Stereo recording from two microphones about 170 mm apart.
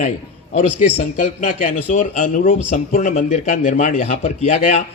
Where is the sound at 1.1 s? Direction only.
50° left (ahead or behind).